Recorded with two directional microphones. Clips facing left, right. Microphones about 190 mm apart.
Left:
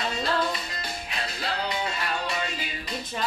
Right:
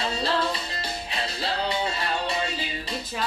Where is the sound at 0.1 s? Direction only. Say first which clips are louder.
Right 1 dB; 30° right (ahead or behind).